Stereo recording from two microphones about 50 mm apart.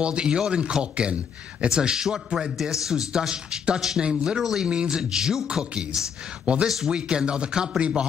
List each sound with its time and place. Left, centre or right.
0.0 s a man's voice: centre
4.4 s a man's voice: centre